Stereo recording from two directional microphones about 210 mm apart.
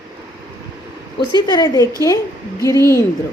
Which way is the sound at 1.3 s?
20° left (ahead or behind).